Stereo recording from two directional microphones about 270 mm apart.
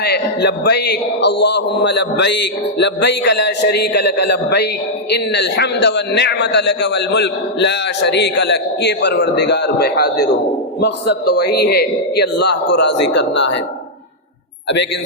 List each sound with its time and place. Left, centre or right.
0.0 s a man's voice: left